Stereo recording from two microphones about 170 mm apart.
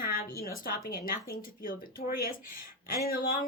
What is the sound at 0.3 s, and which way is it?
Speech, 60° left (ahead or behind).